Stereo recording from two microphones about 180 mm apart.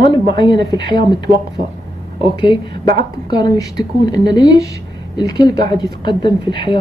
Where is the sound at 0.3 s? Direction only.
25° left (ahead or behind).